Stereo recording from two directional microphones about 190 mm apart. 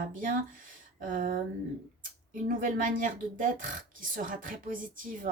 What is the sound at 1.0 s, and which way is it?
A woman's voice, 45° right (ahead or behind).